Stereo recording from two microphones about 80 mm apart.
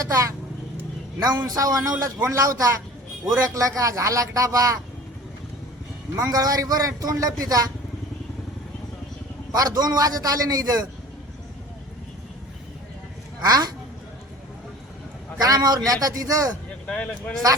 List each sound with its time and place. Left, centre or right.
0.0 s a man's voice: right
1.5 s a man's voice: right
6.1 s a man's voice: right
9.5 s a man's voice: right
13.4 s a man's voice: right
15.4 s a man's voice: right
16.8 s speech: centre